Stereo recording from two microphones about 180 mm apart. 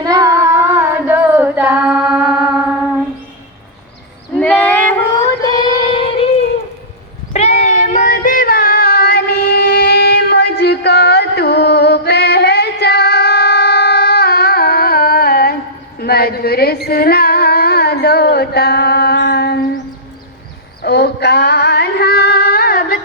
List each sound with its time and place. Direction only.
0.0 s female singing: 20° right (ahead or behind)
4.4 s child singing: 10° left (ahead or behind)
5.4 s child singing: 20° left (ahead or behind)
7.3 s a sound: 40° left (ahead or behind); by 19.5 s 65° left (ahead or behind)
20.8 s female singing: 65° left (ahead or behind)